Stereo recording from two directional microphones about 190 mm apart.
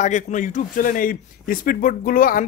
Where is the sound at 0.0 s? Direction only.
40° left (ahead or behind).